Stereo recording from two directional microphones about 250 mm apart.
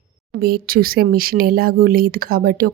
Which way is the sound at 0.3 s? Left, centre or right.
Right.